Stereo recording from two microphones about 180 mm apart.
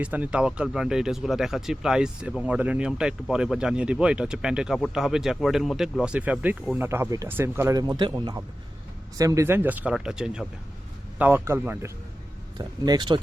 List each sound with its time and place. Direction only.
0.0 s speech: 10° right (ahead or behind)
12.5 s speech: 25° right (ahead or behind)